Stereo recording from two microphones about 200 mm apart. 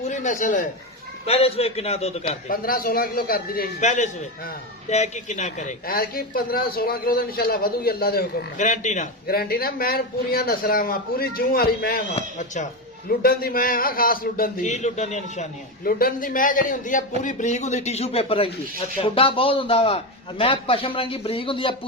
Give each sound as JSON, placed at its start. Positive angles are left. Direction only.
{"t": 0.1, "sound": "speech", "side_deg": 40}
{"t": 1.2, "sound": "a man's voice", "side_deg": 30}
{"t": 2.5, "sound": "speech", "side_deg": 45}
{"t": 9.3, "sound": "speech", "side_deg": 50}
{"t": 12.1, "sound": "a man's voice", "side_deg": 35}
{"t": 13.1, "sound": "a man's voice", "side_deg": 50}